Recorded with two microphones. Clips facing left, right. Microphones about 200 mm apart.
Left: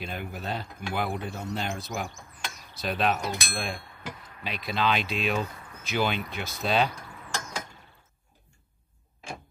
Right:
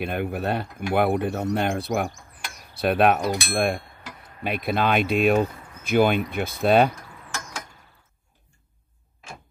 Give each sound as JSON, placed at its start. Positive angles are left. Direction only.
{"t": 0.0, "sound": "speech", "side_deg": -60}
{"t": 2.5, "sound": "a sound", "side_deg": -60}
{"t": 4.4, "sound": "speech", "side_deg": -55}